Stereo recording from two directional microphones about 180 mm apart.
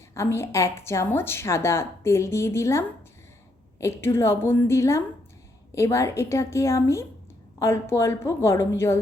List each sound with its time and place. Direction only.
0.1 s a woman's voice: 15° left (ahead or behind)